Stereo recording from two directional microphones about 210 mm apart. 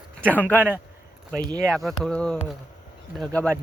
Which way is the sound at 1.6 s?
Centre (ahead or behind).